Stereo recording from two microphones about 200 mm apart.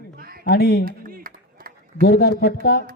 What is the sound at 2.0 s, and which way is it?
Speech, 50° left (ahead or behind).